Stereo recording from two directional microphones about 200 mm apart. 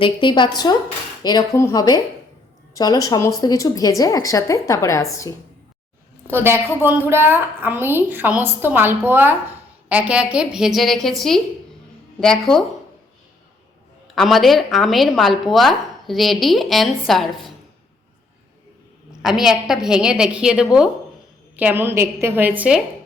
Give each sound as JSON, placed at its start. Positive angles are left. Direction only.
{"t": 0.0, "sound": "a woman's voice", "side_deg": 25}
{"t": 6.3, "sound": "a woman's voice", "side_deg": -10}
{"t": 12.2, "sound": "speech", "side_deg": 0}
{"t": 14.2, "sound": "speech", "side_deg": 0}
{"t": 19.2, "sound": "a woman's voice", "side_deg": 0}